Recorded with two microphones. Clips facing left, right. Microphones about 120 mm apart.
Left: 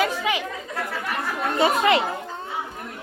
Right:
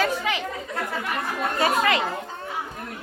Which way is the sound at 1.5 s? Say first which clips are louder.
Left 3 dB; 25° left (ahead or behind).